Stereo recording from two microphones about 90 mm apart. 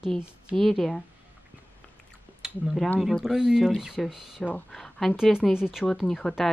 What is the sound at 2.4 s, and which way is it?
Speech, centre (ahead or behind).